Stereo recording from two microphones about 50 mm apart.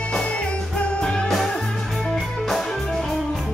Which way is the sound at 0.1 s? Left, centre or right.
Centre.